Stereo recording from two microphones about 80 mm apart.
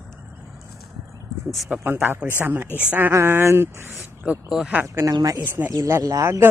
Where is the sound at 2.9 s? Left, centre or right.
Right.